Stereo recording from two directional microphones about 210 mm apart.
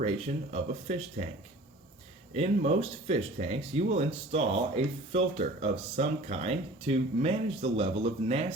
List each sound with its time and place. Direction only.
0.5 s speech: 30° right (ahead or behind)
2.3 s speech: 30° right (ahead or behind)